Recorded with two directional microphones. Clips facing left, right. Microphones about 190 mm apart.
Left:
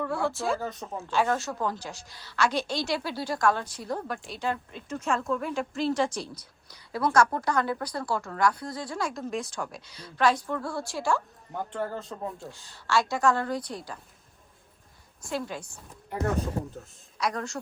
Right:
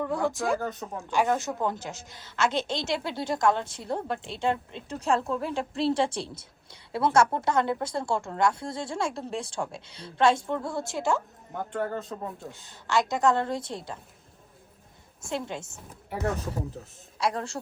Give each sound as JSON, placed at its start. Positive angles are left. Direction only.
{"t": 0.0, "sound": "speech", "side_deg": -15}
{"t": 0.6, "sound": "speech", "side_deg": 0}
{"t": 1.1, "sound": "a woman's voice", "side_deg": -15}
{"t": 11.5, "sound": "speech", "side_deg": 0}
{"t": 12.5, "sound": "a woman's voice", "side_deg": -20}
{"t": 15.2, "sound": "a woman's voice", "side_deg": -25}
{"t": 16.0, "sound": "speech", "side_deg": -5}
{"t": 17.2, "sound": "a woman's voice", "side_deg": -30}